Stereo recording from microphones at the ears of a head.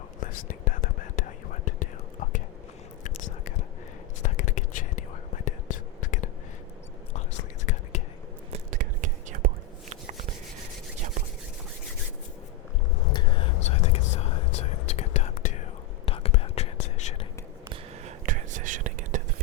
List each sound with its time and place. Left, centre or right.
0.2 s whispering: left
8.5 s whispering: right
9.9 s a sound: right
13.0 s whispering: left
17.7 s whispering: right